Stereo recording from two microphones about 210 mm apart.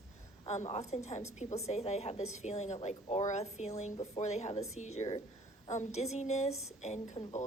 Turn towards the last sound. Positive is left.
turn(degrees=35)  # may be behind; listen again after turning